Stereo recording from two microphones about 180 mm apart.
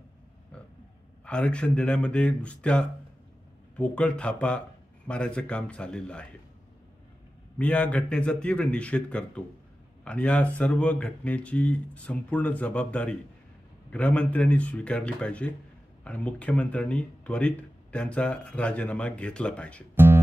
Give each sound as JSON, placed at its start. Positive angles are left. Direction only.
{"t": 1.2, "sound": "a man's voice", "side_deg": 5}
{"t": 7.5, "sound": "speech", "side_deg": 10}